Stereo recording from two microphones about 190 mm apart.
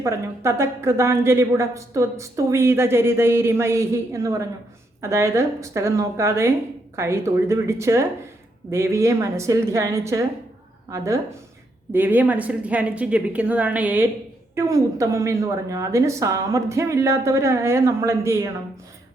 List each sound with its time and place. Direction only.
0.0 s a woman's voice: 15° right (ahead or behind)